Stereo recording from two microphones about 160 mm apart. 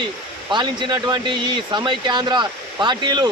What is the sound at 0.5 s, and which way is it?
Speech, 30° right (ahead or behind).